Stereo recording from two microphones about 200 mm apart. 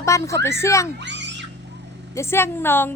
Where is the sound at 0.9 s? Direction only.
60° right (ahead or behind).